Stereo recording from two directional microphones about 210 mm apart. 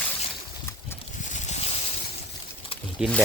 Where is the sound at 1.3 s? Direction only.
35° left (ahead or behind).